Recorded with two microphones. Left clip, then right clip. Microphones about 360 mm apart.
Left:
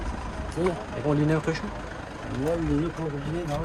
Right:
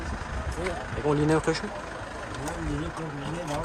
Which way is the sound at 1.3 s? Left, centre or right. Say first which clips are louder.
Right 2 dB; centre.